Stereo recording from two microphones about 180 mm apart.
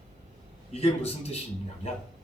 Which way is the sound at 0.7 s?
35° left (ahead or behind).